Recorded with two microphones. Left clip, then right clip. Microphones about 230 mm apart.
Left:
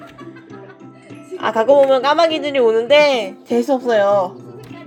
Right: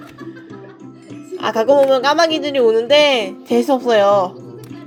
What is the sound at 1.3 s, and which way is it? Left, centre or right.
A woman's voice, centre.